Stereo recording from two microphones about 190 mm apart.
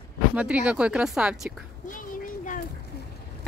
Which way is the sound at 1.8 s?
45° left (ahead or behind).